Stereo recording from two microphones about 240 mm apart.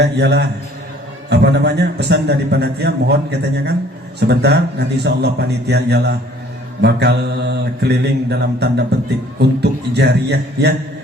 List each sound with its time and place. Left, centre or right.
0.0 s a man's voice: right